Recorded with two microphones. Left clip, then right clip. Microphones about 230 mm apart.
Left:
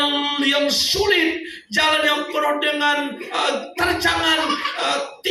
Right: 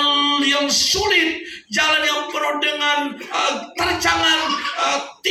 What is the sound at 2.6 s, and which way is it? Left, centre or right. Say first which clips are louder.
Speech: even; centre.